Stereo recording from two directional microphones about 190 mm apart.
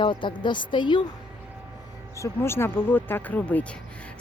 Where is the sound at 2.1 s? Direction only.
15° left (ahead or behind).